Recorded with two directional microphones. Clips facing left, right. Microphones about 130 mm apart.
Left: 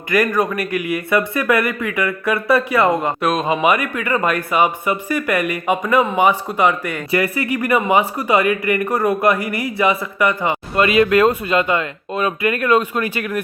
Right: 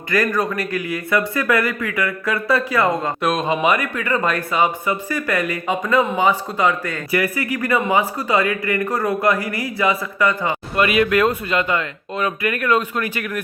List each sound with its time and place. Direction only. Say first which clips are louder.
0.1 s speech: left 2 dB; 20° left (ahead or behind)
3.2 s speech: left 1 dB; 5° left (ahead or behind); by 13.4 s 25° left (ahead or behind)